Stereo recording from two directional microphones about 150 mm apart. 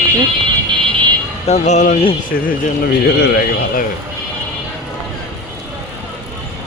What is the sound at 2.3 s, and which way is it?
A man's voice, 90° left.